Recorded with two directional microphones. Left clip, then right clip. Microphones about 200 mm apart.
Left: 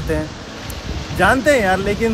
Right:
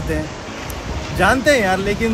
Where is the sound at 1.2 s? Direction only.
10° left (ahead or behind).